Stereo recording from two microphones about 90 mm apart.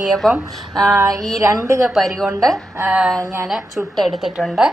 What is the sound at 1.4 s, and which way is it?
Speech, 30° right (ahead or behind).